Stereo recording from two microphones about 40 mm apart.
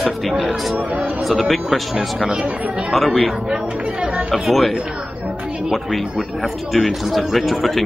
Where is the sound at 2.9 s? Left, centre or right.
Centre.